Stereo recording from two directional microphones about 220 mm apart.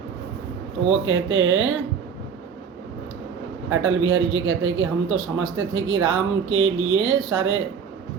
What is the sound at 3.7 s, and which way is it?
A man's voice, 65° right (ahead or behind).